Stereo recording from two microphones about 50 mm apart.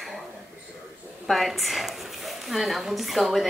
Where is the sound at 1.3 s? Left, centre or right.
Centre.